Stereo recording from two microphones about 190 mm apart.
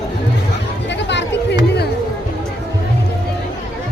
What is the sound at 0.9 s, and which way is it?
Chatter, 65° left (ahead or behind).